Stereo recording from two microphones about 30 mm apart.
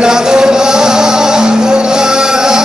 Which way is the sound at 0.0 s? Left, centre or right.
Right.